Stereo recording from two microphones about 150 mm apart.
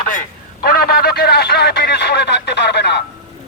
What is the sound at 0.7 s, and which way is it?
Telephone, 90° left.